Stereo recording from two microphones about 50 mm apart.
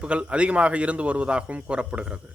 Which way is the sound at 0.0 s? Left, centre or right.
Right.